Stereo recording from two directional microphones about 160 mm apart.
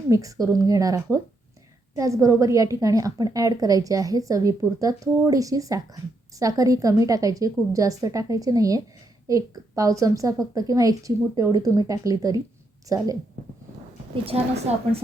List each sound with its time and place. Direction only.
0.1 s a woman's voice: 20° right (ahead or behind)
14.3 s a woman's voice: 40° right (ahead or behind)